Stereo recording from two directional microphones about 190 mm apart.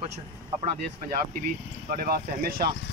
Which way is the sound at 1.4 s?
50° right (ahead or behind).